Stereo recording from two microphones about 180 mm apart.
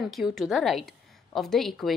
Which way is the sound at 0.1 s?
Centre (ahead or behind).